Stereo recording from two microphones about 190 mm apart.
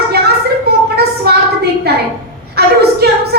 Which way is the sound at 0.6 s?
55° right (ahead or behind).